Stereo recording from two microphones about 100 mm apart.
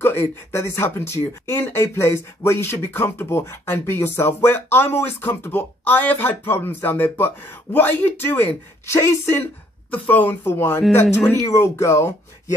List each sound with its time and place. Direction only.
0.0 s speech: 25° left (ahead or behind)